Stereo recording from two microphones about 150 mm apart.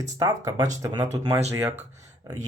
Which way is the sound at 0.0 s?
25° right (ahead or behind).